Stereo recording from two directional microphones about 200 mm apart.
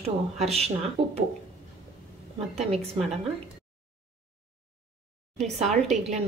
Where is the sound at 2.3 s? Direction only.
30° right (ahead or behind).